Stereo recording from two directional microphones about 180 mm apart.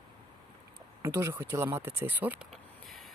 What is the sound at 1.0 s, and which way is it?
Speech, 15° right (ahead or behind).